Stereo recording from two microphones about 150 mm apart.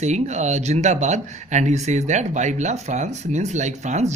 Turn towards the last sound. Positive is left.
turn(degrees=-50)  # may be behind; listen again after turning